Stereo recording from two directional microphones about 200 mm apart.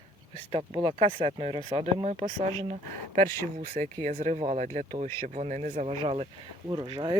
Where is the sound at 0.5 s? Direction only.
20° right (ahead or behind); by 6.0 s 40° right (ahead or behind).